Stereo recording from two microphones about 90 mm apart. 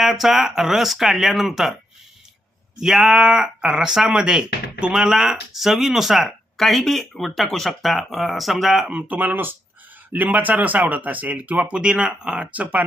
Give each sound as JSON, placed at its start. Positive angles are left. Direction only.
{"t": 0.0, "sound": "speech", "side_deg": -5}
{"t": 2.8, "sound": "speech", "side_deg": -5}
{"t": 8.9, "sound": "speech", "side_deg": -15}